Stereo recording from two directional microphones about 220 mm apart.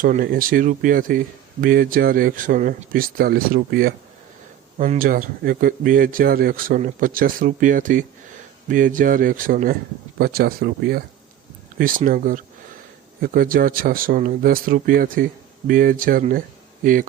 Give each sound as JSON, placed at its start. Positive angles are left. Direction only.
{"t": 0.0, "sound": "speech", "side_deg": -40}